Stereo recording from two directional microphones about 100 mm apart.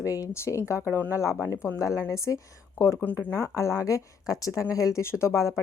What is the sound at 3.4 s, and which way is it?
Speech, 35° left (ahead or behind).